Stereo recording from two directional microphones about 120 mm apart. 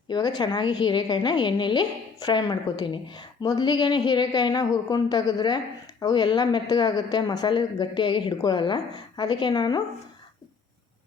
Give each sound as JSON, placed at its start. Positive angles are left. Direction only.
{"t": 0.1, "sound": "a woman's voice", "side_deg": 35}